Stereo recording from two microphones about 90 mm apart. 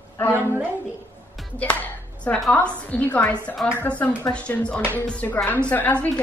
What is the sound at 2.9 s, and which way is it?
A woman's voice, 15° left (ahead or behind).